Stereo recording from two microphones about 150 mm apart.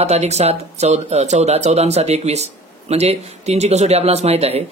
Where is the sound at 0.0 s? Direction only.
45° right (ahead or behind).